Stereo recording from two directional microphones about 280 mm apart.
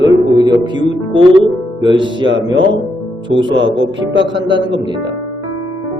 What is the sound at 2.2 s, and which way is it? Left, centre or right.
Speech, right.